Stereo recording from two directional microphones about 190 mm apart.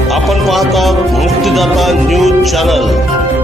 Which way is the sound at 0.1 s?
Centre (ahead or behind).